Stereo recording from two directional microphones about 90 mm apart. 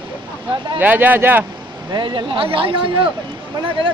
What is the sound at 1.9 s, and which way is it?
Speech, 60° right (ahead or behind).